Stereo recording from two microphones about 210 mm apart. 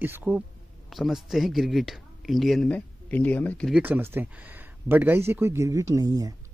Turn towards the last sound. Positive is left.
turn(degrees=-15)  # may be behind; listen again after turning